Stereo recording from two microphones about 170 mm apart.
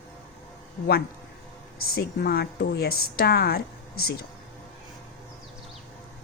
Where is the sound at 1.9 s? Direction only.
65° left (ahead or behind).